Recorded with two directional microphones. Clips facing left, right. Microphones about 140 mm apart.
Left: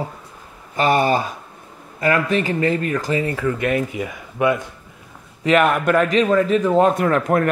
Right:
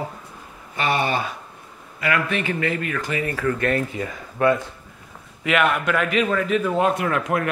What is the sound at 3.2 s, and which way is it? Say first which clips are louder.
Speech: left 2 dB; 15° left (ahead or behind).